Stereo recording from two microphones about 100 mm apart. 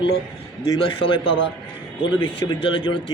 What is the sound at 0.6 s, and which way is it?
A man's voice, 40° left (ahead or behind).